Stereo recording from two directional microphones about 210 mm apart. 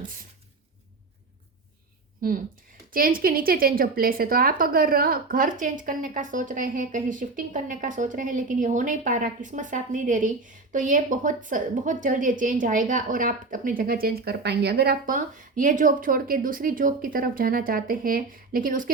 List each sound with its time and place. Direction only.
2.2 s a woman's voice: 40° right (ahead or behind)